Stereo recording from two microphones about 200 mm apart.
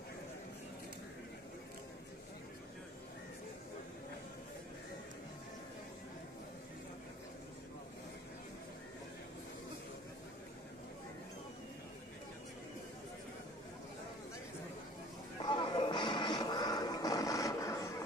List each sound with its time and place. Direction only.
15.3 s music: 25° left (ahead or behind)